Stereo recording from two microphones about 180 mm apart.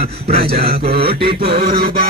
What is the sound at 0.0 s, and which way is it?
A man's voice, 35° right (ahead or behind).